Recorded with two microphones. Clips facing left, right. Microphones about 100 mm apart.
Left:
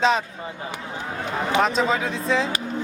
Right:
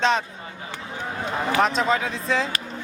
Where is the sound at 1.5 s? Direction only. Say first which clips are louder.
Left 1 dB; centre (ahead or behind).